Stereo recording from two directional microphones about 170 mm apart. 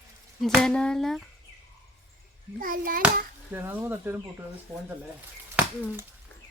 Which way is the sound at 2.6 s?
55° right (ahead or behind).